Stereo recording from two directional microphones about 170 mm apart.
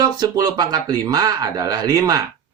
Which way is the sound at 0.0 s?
25° right (ahead or behind).